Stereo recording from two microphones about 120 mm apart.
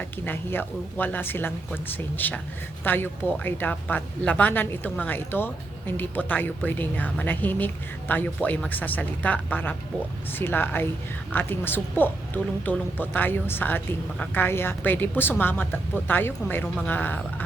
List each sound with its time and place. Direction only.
0.3 s speech: 15° left (ahead or behind)